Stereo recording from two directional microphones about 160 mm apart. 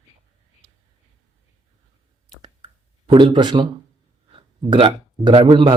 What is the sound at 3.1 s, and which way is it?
Speech, 30° right (ahead or behind).